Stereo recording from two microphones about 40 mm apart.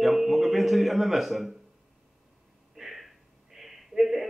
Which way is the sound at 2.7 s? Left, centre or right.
Centre.